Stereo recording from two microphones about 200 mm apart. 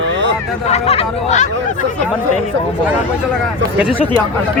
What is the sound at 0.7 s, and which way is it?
Speech, 30° left (ahead or behind).